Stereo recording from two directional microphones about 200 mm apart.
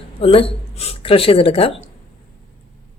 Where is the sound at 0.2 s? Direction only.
30° left (ahead or behind).